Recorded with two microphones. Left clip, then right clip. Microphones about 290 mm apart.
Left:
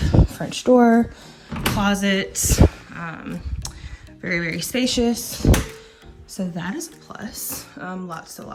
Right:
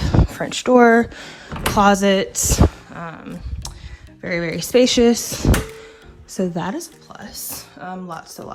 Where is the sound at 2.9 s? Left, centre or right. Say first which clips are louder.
Even; centre.